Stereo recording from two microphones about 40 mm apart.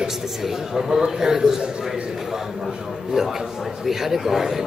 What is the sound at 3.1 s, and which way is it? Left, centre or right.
A man's voice, centre.